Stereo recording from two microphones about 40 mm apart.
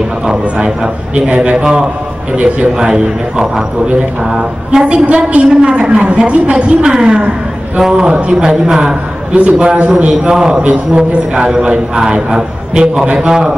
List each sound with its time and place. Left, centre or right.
0.3 s a man's voice: right
1.6 s a man's voice: centre
9.4 s a man's voice: right